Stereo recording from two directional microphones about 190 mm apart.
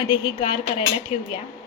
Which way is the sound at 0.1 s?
25° left (ahead or behind).